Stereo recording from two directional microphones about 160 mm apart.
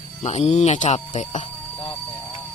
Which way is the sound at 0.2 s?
45° left (ahead or behind).